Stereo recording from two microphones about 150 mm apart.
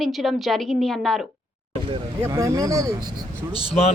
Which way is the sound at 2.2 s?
20° right (ahead or behind).